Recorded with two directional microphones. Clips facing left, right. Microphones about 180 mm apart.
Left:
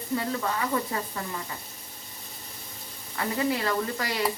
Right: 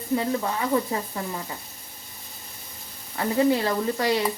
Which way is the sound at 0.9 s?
20° right (ahead or behind).